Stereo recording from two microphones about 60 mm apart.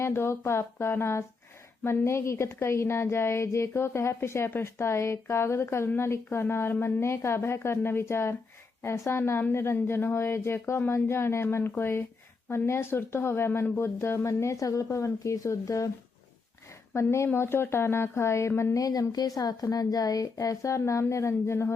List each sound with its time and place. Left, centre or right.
0.0 s a woman's voice: left
16.9 s a woman's voice: left
18.8 s a woman's voice: left